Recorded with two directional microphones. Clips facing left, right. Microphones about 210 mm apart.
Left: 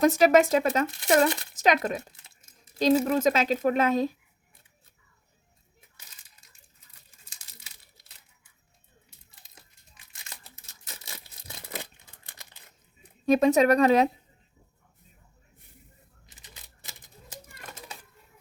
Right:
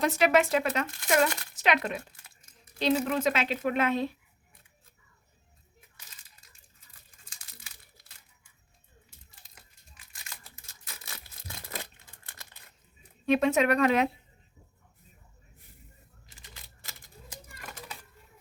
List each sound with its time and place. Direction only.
0.0 s a woman's voice: 40° left (ahead or behind)
11.0 s a sound: 25° left (ahead or behind)
13.2 s a woman's voice: 40° left (ahead or behind)